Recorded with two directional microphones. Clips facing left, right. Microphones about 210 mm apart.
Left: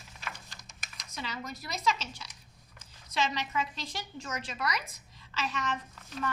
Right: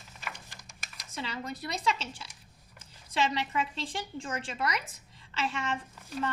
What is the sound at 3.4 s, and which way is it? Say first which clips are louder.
A woman's voice: right 2 dB; 30° right (ahead or behind).